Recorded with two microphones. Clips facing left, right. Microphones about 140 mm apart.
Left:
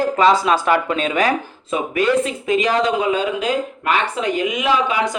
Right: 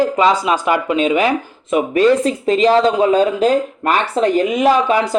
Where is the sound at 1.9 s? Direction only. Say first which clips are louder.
Right 4 dB; 35° right (ahead or behind).